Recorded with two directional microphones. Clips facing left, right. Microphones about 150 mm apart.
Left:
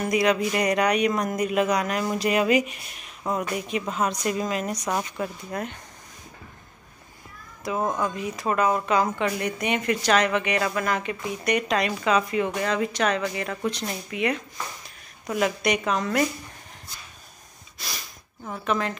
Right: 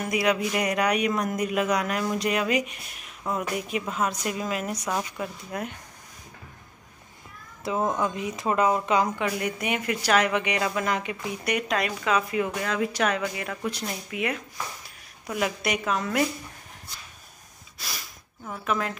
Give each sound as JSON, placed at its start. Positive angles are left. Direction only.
{"t": 0.0, "sound": "speech", "side_deg": -5}
{"t": 4.8, "sound": "speech", "side_deg": 10}
{"t": 5.2, "sound": "speech", "side_deg": -10}
{"t": 8.0, "sound": "speech", "side_deg": -20}
{"t": 9.2, "sound": "speech", "side_deg": -5}
{"t": 17.7, "sound": "snort", "side_deg": -5}
{"t": 18.6, "sound": "speech", "side_deg": -5}